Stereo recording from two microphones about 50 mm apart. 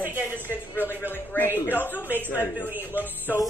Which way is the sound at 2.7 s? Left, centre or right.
Right.